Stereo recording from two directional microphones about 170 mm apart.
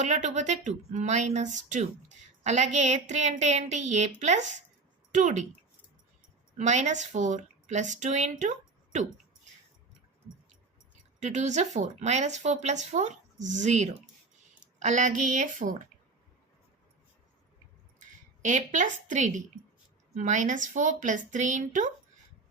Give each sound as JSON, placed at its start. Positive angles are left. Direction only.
{"t": 0.0, "sound": "speech", "side_deg": -45}
{"t": 6.6, "sound": "a woman's voice", "side_deg": -45}
{"t": 11.2, "sound": "a woman's voice", "side_deg": -45}
{"t": 18.4, "sound": "speech", "side_deg": -45}